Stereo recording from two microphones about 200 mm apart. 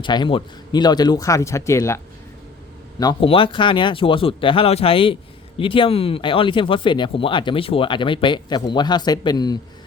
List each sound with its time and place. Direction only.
0.0 s speech: 25° left (ahead or behind)
3.0 s speech: 25° left (ahead or behind)